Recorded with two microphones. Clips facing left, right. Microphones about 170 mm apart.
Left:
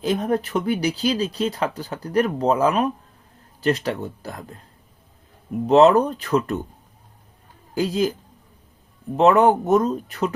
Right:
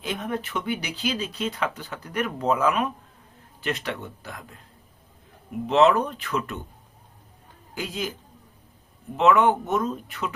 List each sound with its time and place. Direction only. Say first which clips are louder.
0.0 s speech: left 8 dB; 35° left (ahead or behind)
5.6 s speech: left 5 dB; 40° left (ahead or behind)
7.8 s speech: left 10 dB; 35° left (ahead or behind)
9.1 s speech: left 4 dB; 40° left (ahead or behind)